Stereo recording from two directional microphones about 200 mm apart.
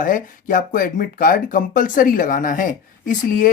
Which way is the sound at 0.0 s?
40° left (ahead or behind).